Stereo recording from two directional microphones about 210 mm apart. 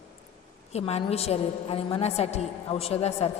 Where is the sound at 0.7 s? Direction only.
30° left (ahead or behind).